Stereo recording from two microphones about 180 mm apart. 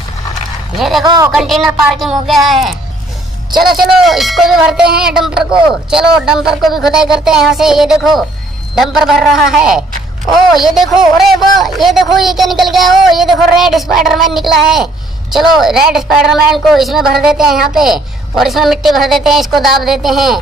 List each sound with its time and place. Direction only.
0.7 s speech: centre (ahead or behind)
1.0 s speech: 20° right (ahead or behind)
1.3 s speech: centre (ahead or behind)